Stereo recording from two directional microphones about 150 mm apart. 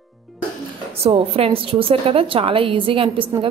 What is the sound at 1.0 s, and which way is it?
Speech, 40° right (ahead or behind).